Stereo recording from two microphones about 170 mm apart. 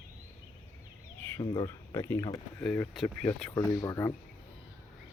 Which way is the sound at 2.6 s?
5° left (ahead or behind).